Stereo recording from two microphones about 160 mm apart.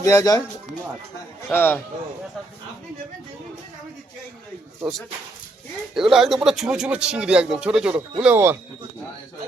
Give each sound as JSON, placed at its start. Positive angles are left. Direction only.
{"t": 0.0, "sound": "speech", "side_deg": 20}
{"t": 1.5, "sound": "a man's voice", "side_deg": 15}
{"t": 5.9, "sound": "a man's voice", "side_deg": -5}